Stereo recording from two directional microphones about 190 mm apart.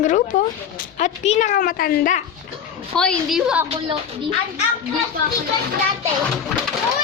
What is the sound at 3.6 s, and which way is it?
Speech, 30° right (ahead or behind).